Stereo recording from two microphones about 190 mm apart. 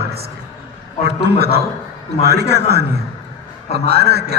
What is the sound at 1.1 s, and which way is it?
A man's voice, 60° right (ahead or behind).